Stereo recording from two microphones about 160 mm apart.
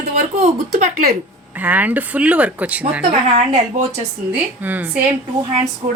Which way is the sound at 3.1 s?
45° right (ahead or behind).